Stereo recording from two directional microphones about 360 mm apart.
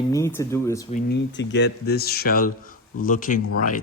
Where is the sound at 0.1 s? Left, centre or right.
Centre.